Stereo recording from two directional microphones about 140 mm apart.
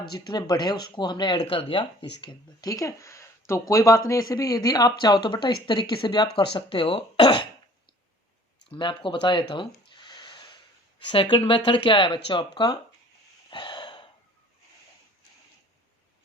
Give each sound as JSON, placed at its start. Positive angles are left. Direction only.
{"t": 0.1, "sound": "speech", "side_deg": 30}
{"t": 8.7, "sound": "speech", "side_deg": 35}
{"t": 13.5, "sound": "gasp", "side_deg": 35}